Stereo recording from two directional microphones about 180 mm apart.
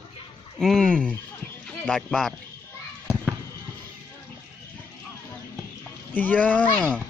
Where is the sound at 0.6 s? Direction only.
Centre (ahead or behind).